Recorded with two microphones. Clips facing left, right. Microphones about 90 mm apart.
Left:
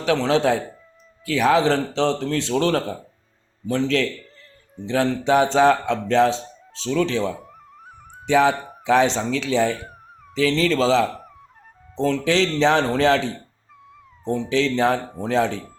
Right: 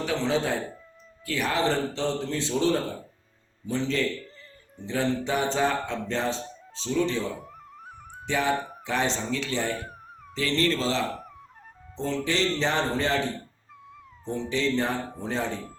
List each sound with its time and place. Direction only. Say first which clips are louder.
0.0 s speech: left 7 dB; 90° left
1.6 s a man's voice: left 6 dB; 90° left
4.9 s speech: left 7 dB; 90° left
8.3 s speech: left 8 dB; 90° left
11.9 s speech: left 7 dB; 90° left
14.3 s speech: left 7 dB; centre (ahead or behind)
14.5 s speech: left 7 dB; 90° left